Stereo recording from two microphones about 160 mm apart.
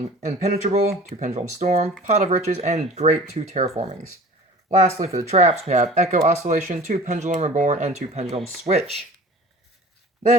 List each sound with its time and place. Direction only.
0.0 s speech: 45° right (ahead or behind)